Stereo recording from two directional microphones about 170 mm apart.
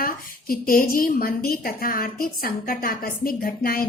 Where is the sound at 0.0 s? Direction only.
60° left (ahead or behind).